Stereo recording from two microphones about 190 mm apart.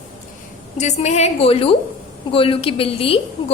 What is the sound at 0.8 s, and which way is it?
A woman's voice, 35° left (ahead or behind).